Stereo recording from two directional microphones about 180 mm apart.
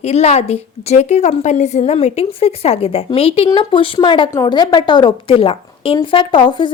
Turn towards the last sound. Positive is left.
turn(degrees=25)  # may be behind; listen again after turning